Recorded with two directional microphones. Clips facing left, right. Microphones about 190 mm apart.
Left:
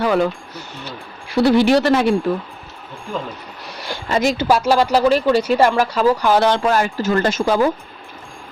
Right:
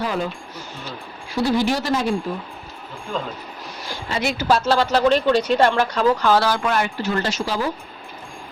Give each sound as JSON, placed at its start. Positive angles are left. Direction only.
{"t": 0.0, "sound": "a sound", "side_deg": 70}
{"t": 0.9, "sound": "speech", "side_deg": 65}
{"t": 3.7, "sound": "speech", "side_deg": 70}
{"t": 4.1, "sound": "speech", "side_deg": 40}
{"t": 4.4, "sound": "speech", "side_deg": 10}
{"t": 6.6, "sound": "speech", "side_deg": 40}
{"t": 7.0, "sound": "speech", "side_deg": 50}